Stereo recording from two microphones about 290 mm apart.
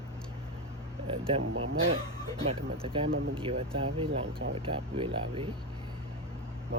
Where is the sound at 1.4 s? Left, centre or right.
Right.